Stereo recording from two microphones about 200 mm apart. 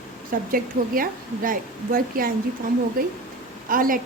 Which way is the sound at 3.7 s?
45° right (ahead or behind).